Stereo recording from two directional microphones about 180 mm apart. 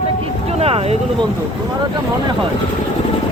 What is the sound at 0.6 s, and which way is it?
Speech, 35° right (ahead or behind).